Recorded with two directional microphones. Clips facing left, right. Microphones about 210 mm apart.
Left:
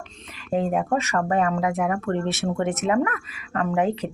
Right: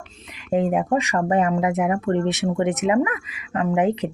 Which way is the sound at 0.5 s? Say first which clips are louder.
Right 3 dB; 15° right (ahead or behind).